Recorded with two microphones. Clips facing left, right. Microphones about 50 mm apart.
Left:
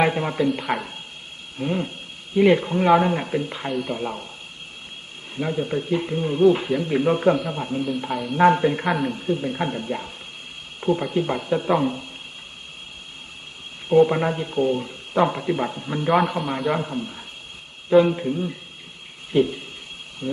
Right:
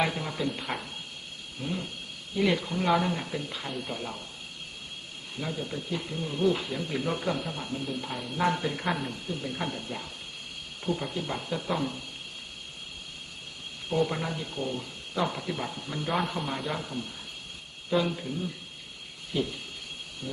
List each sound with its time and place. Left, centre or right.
0.0 s speech: left
0.7 s speech: centre
1.5 s speech: left
5.4 s speech: left
8.9 s speech: centre
9.1 s speech: left
10.8 s a sound: left
11.1 s speech: left
13.9 s speech: left
16.4 s a man's voice: centre
16.7 s speech: left
20.2 s a sound: left